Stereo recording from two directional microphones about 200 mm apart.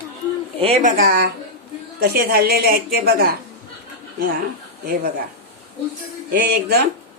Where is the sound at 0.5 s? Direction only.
30° right (ahead or behind).